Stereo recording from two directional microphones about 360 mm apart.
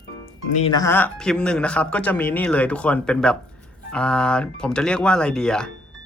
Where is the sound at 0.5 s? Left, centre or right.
Centre.